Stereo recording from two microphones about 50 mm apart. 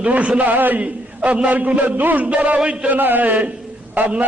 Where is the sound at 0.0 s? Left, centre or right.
Right.